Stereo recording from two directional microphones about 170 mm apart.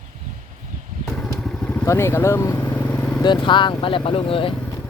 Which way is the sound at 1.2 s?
5° left (ahead or behind).